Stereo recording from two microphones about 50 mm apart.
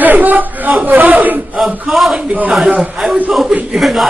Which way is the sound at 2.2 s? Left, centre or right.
Right.